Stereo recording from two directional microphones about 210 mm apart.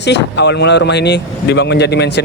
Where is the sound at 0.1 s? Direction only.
55° left (ahead or behind).